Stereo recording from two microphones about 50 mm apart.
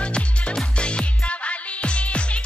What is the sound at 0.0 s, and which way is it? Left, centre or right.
Music, left.